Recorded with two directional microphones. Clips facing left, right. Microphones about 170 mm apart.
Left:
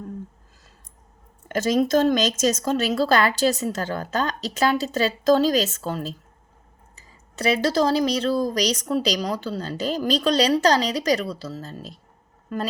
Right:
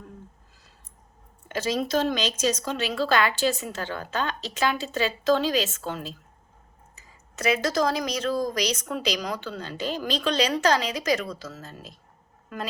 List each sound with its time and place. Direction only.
1.5 s speech: 45° left (ahead or behind)